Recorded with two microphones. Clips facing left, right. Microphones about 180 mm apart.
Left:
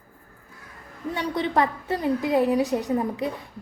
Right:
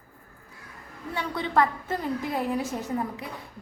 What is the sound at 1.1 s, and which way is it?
A woman's voice, 20° left (ahead or behind).